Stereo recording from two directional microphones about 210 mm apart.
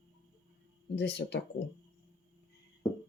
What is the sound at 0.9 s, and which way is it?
Speech, 55° left (ahead or behind).